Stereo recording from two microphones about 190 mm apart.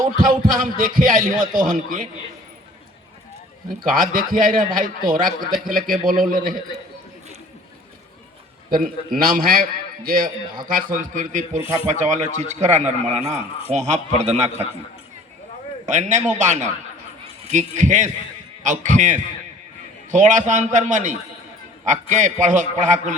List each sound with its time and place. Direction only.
0.2 s a man's voice: 50° right (ahead or behind)
3.8 s a man's voice: 45° right (ahead or behind)
8.7 s a man's voice: 50° right (ahead or behind)
15.9 s a man's voice: 40° right (ahead or behind)